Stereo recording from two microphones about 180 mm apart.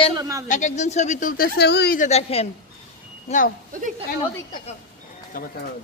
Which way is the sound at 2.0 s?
35° left (ahead or behind).